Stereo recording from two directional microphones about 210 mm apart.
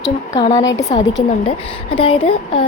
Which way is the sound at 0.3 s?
20° left (ahead or behind).